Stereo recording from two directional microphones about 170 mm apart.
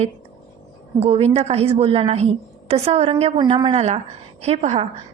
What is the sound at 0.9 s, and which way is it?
A woman's voice, 35° right (ahead or behind).